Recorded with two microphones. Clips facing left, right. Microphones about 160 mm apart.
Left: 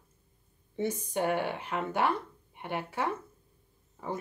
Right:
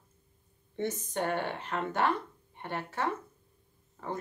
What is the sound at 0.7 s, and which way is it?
Speech, 10° left (ahead or behind).